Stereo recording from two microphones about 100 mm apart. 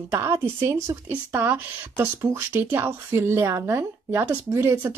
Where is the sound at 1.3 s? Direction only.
20° right (ahead or behind).